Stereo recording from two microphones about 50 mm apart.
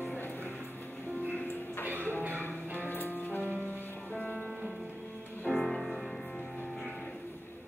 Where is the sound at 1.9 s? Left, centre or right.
Right.